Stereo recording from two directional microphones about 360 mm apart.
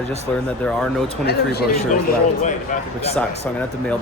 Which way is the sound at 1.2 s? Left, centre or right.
Left.